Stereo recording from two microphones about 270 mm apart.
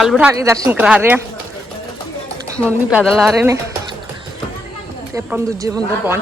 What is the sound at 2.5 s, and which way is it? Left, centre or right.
Speech, centre.